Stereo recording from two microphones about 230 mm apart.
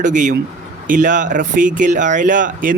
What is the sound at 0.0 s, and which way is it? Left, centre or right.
Speech, right.